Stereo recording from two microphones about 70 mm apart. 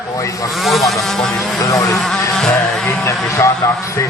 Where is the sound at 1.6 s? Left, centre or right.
Left.